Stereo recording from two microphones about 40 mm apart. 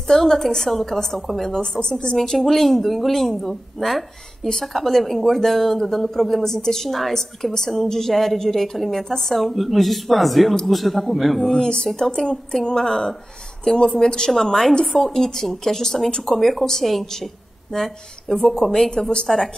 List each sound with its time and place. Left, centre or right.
0.1 s a woman's voice: centre
1.6 s a woman's voice: left
2.1 s speech: centre
7.5 s a woman's voice: centre
11.5 s a woman's voice: centre